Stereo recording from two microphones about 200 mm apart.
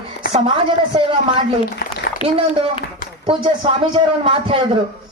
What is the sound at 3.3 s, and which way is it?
Speech, 25° right (ahead or behind).